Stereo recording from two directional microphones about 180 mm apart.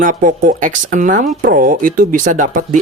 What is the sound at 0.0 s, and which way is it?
Speech, 50° right (ahead or behind).